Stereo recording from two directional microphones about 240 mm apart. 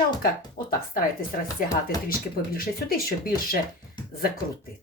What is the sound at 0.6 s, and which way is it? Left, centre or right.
Speech, left.